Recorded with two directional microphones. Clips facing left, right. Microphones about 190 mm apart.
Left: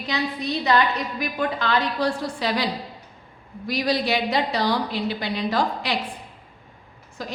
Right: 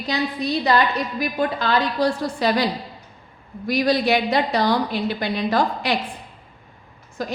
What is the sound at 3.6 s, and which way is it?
A woman's voice, 50° right (ahead or behind).